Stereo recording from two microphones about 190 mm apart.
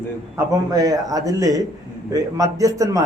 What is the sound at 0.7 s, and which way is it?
A man's voice, 20° right (ahead or behind).